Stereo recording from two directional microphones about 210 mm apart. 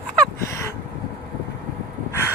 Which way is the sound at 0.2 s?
15° left (ahead or behind).